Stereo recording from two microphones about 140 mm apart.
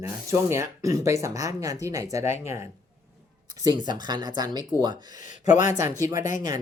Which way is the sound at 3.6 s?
30° right (ahead or behind).